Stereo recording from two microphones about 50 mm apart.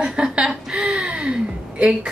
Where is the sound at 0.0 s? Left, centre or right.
Centre.